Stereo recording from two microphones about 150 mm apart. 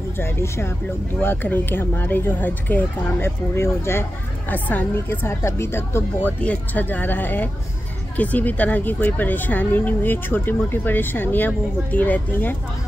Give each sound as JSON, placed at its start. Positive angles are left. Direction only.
{"t": 0.2, "sound": "a woman's voice", "side_deg": 15}